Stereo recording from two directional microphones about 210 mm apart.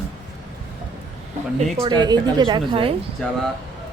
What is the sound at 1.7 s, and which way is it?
A woman's voice, 25° right (ahead or behind).